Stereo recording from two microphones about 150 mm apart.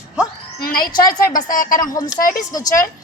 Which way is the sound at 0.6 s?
75° left (ahead or behind).